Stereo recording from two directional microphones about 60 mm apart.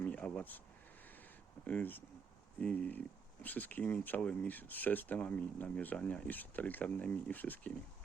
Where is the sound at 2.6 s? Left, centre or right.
Centre.